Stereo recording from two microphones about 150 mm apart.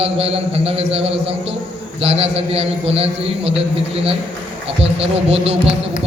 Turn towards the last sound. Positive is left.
turn(degrees=-40)  # may be behind; listen again after turning